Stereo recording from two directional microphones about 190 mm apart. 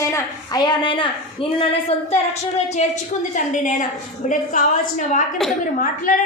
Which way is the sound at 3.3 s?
40° left (ahead or behind).